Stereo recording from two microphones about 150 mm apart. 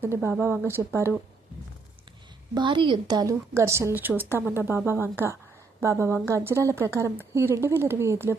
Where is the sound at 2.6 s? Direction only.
30° right (ahead or behind); by 8.4 s 15° right (ahead or behind).